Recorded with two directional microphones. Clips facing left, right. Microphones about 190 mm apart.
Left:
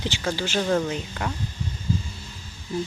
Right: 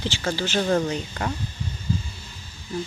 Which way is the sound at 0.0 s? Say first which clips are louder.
Right 1 dB; 15° left (ahead or behind).